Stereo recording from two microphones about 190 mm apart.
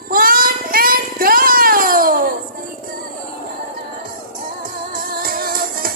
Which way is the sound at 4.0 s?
50° right (ahead or behind).